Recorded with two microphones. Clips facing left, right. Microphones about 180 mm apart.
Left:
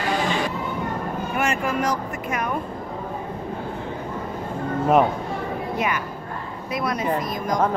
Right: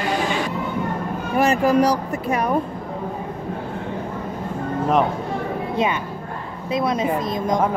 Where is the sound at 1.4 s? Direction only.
35° right (ahead or behind).